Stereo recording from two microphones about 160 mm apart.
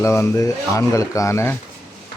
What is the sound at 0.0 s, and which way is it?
Speech, 15° left (ahead or behind).